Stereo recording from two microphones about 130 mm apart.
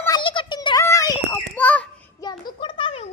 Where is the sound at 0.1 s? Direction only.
40° left (ahead or behind).